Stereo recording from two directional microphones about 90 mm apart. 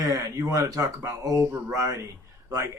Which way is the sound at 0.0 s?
40° right (ahead or behind).